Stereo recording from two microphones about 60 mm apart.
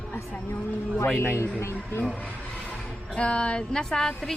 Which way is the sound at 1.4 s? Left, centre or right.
Left.